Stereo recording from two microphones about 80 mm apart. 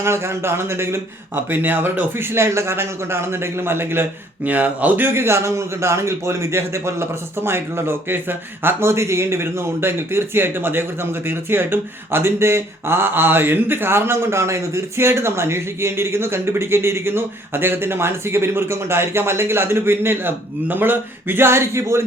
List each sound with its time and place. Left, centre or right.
0.0 s a man's voice: right